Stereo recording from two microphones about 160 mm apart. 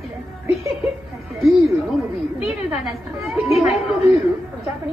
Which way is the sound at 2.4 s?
5° right (ahead or behind).